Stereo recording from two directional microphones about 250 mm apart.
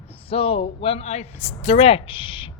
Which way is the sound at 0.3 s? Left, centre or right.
Left.